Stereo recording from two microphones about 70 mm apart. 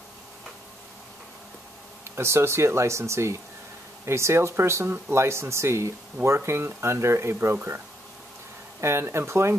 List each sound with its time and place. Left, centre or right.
2.0 s speech: right
8.8 s speech: right